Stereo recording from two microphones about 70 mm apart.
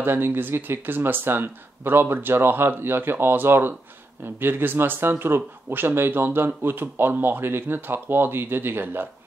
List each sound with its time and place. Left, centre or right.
0.0 s speech: right